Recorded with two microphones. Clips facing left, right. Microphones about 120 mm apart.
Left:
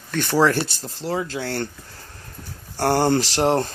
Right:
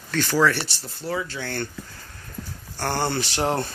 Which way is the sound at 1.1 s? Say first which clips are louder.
Left 3 dB; 40° left (ahead or behind).